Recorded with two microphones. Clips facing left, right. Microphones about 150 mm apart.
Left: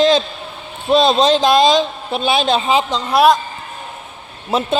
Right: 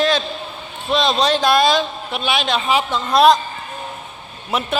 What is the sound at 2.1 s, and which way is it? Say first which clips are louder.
Speech: left 5 dB; 30° left (ahead or behind).